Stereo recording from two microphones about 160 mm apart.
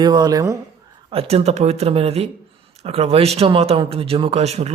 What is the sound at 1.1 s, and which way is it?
Speech, 40° right (ahead or behind).